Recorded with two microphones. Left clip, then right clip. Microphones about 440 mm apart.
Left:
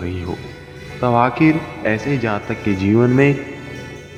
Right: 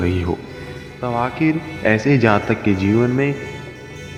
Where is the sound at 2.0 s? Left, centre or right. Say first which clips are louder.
Right 5 dB; right.